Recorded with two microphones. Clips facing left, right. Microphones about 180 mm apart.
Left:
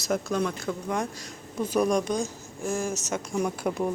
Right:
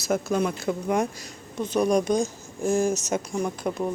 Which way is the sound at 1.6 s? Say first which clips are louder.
Right 1 dB; 10° left (ahead or behind).